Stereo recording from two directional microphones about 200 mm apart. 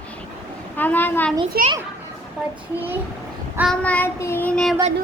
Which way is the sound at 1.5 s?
50° right (ahead or behind).